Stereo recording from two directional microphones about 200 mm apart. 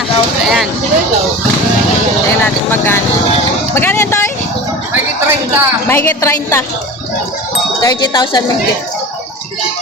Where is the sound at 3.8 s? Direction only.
10° left (ahead or behind).